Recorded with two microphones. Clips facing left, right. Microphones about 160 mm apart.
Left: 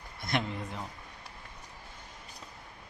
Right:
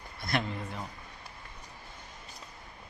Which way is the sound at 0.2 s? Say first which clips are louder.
Even; 20° left (ahead or behind).